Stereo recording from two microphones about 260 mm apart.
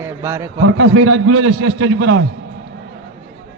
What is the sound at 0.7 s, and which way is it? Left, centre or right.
A man's voice, right.